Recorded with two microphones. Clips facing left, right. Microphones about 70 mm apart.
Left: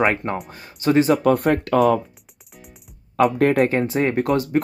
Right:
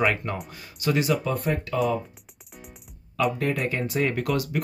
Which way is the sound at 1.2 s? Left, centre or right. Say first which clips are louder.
Left 9 dB; left.